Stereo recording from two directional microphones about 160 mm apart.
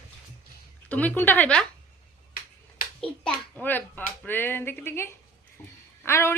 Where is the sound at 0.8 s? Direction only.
10° left (ahead or behind).